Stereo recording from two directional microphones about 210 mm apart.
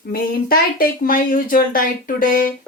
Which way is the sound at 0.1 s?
45° left (ahead or behind).